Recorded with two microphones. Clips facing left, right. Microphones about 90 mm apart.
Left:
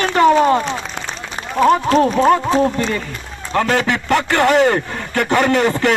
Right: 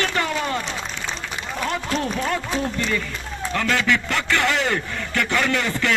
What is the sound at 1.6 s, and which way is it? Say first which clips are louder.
Speech: left 13 dB; 40° left (ahead or behind).